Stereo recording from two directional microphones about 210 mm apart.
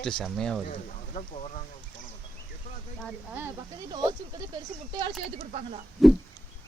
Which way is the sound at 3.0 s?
5° right (ahead or behind).